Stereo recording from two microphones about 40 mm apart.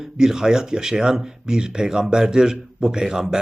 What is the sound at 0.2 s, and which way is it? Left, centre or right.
Speech, centre.